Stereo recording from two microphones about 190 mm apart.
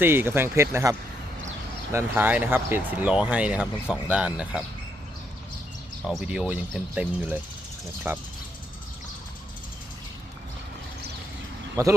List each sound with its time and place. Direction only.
0.0 s speech: 10° right (ahead or behind)
6.1 s speech: 5° right (ahead or behind)
11.8 s speech: 15° right (ahead or behind)